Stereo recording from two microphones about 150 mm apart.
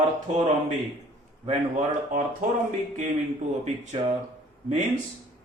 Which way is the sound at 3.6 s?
45° right (ahead or behind).